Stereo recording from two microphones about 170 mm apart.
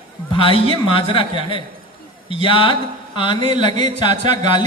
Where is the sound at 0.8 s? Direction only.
30° left (ahead or behind).